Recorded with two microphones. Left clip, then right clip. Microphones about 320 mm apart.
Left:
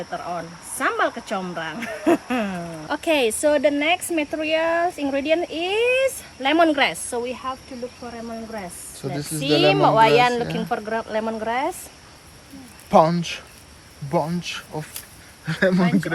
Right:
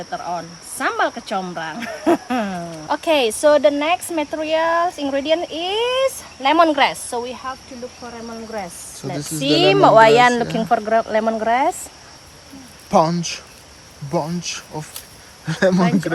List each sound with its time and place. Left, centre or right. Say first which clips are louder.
0.1 s speech: right 7 dB; centre
9.0 s speech: right 2 dB; centre
9.4 s speech: right 4 dB; right
12.9 s speech: even; centre